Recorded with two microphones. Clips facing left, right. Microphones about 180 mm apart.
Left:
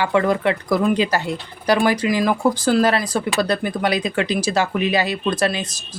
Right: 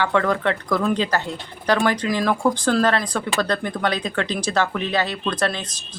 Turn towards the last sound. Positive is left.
turn(degrees=10)  # may be behind; listen again after turning